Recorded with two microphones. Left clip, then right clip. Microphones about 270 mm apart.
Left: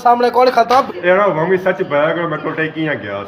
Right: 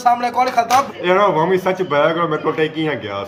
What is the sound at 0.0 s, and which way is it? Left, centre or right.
Speech, left.